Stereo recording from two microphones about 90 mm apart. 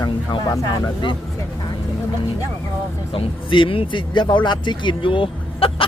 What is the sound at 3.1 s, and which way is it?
Speech, 70° left (ahead or behind).